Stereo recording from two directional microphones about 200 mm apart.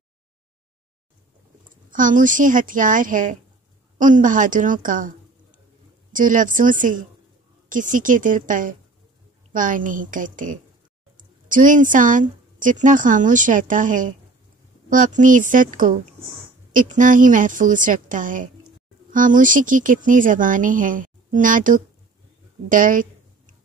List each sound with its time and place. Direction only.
1.9 s a woman's voice: 40° right (ahead or behind)